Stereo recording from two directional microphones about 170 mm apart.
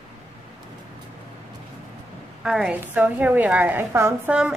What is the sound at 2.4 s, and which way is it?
A woman's voice, 5° right (ahead or behind).